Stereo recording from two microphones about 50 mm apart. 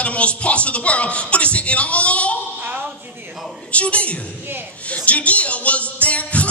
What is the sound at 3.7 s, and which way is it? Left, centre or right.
A man's voice, left.